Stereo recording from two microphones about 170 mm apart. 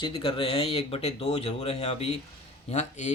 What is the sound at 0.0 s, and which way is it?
Speech, 30° left (ahead or behind).